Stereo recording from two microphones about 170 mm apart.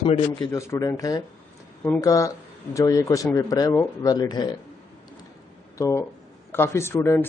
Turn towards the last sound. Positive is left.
turn(degrees=15)  # may be behind; listen again after turning